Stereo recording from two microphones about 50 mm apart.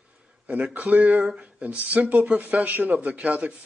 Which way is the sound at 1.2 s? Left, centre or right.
Centre.